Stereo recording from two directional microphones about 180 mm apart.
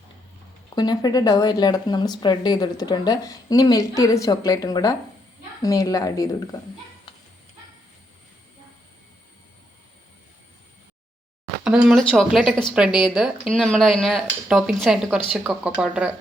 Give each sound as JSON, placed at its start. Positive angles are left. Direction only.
{"t": 0.8, "sound": "speech", "side_deg": 20}
{"t": 11.6, "sound": "speech", "side_deg": -5}
{"t": 12.1, "sound": "dishes", "side_deg": 0}